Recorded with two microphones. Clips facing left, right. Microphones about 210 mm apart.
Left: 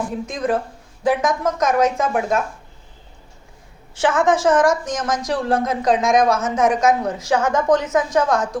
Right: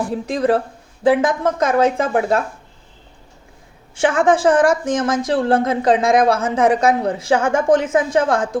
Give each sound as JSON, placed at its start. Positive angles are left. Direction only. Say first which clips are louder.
{"t": 0.3, "sound": "speech", "louder": "right 6 dB", "side_deg": -35}
{"t": 4.1, "sound": "speech", "louder": "right 2 dB", "side_deg": -30}